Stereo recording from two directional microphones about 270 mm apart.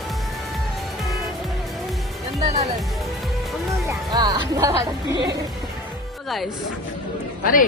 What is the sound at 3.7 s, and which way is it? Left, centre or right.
Music, centre.